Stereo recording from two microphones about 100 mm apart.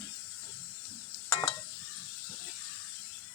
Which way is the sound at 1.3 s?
40° left (ahead or behind).